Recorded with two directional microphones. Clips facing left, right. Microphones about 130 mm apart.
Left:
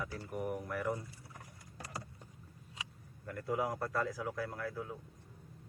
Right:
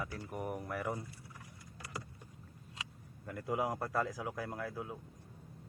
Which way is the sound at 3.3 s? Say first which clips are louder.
Even; 10° right (ahead or behind).